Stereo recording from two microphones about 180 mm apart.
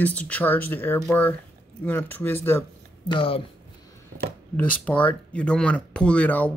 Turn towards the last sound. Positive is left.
turn(degrees=10)  # may be behind; listen again after turning